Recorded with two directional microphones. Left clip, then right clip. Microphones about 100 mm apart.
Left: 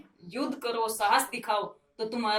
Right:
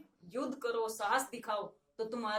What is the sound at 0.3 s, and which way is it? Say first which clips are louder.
Speech: left 5 dB; 40° right (ahead or behind).